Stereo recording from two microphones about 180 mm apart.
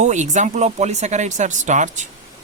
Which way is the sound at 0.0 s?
40° right (ahead or behind).